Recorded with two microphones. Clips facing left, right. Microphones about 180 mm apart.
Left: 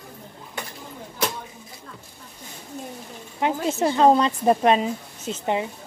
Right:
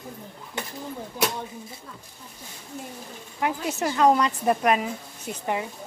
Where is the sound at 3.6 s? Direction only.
25° left (ahead or behind).